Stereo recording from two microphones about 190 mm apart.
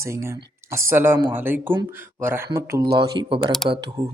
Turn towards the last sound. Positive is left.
turn(degrees=-20)  # may be behind; listen again after turning